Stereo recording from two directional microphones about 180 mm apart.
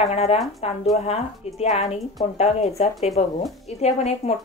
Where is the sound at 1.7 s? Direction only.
35° left (ahead or behind).